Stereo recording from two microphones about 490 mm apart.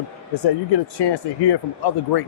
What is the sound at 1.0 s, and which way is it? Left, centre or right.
Speech, left.